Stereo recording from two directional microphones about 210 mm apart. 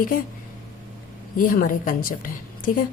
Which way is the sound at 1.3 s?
40° left (ahead or behind).